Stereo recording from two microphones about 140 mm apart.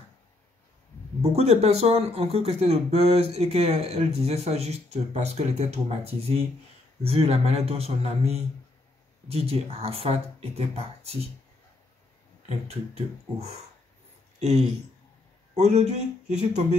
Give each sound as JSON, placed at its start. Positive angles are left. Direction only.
{"t": 1.2, "sound": "speech", "side_deg": -50}
{"t": 12.4, "sound": "speech", "side_deg": -50}
{"t": 15.5, "sound": "speech", "side_deg": -55}